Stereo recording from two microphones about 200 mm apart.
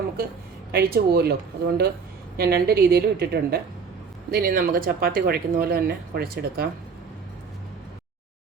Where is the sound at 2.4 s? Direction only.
50° right (ahead or behind).